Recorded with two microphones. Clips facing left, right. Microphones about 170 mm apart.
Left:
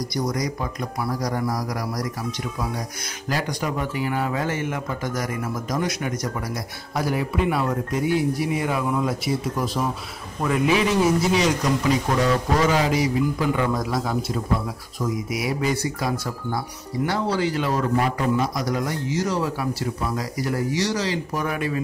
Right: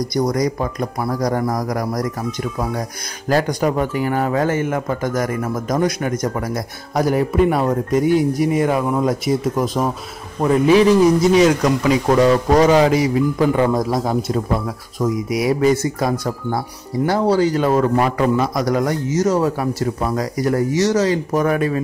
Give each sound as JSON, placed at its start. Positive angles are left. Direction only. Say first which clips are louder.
{"t": 0.1, "sound": "speech", "louder": "right 8 dB", "side_deg": -45}
{"t": 3.3, "sound": "speech", "louder": "right 9 dB", "side_deg": -50}
{"t": 10.4, "sound": "a man's voice", "louder": "right 8 dB", "side_deg": -35}
{"t": 11.6, "sound": "speech", "louder": "right 5 dB", "side_deg": -85}
{"t": 13.4, "sound": "a man's voice", "louder": "right 7 dB", "side_deg": -40}
{"t": 15.4, "sound": "speech", "louder": "right 9 dB", "side_deg": -50}
{"t": 17.9, "sound": "a man's voice", "louder": "right 5 dB", "side_deg": -80}
{"t": 18.7, "sound": "speech", "louder": "right 7 dB", "side_deg": -55}